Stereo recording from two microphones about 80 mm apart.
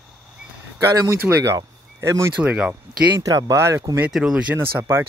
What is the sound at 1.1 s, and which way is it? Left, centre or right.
Speech, right.